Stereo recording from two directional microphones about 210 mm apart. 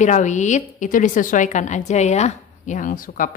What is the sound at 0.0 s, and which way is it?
A woman's voice, 35° left (ahead or behind).